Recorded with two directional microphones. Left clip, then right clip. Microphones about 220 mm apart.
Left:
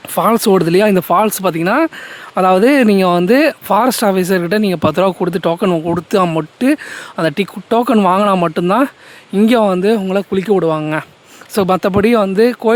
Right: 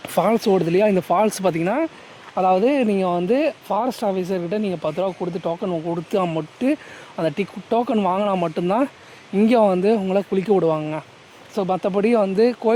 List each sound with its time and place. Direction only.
0.1 s speech: 15° left (ahead or behind)
0.3 s speech: 30° left (ahead or behind)